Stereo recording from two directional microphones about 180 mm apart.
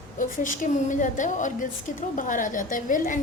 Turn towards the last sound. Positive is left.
turn(degrees=45)  # may be behind; listen again after turning